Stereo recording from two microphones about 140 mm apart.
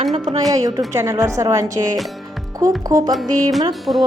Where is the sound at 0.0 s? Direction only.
55° right (ahead or behind).